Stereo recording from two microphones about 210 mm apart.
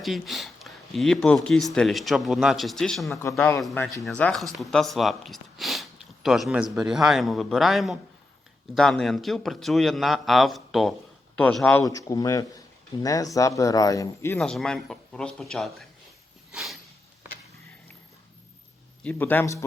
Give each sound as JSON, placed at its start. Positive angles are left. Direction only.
{"t": 0.0, "sound": "a man's voice", "side_deg": 0}
{"t": 14.3, "sound": "speech", "side_deg": 0}
{"t": 16.5, "sound": "a sound", "side_deg": -5}
{"t": 19.0, "sound": "a man's voice", "side_deg": 10}